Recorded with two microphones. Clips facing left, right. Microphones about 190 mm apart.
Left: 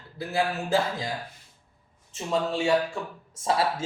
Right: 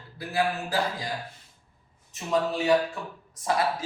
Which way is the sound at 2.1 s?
30° left (ahead or behind).